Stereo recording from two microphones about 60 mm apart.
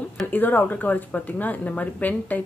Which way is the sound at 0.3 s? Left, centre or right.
Left.